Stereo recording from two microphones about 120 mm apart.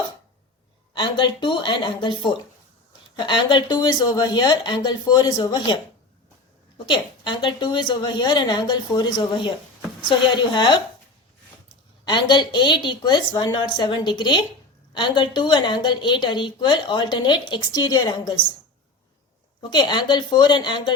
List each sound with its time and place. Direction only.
0.9 s a woman's voice: 40° left (ahead or behind)
6.8 s a woman's voice: 40° left (ahead or behind)
12.0 s a woman's voice: 40° left (ahead or behind)
19.7 s a woman's voice: 40° left (ahead or behind)